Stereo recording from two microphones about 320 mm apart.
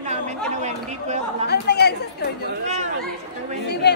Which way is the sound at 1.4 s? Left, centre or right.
Left.